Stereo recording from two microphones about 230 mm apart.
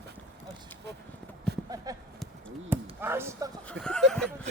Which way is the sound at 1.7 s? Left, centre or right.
Centre.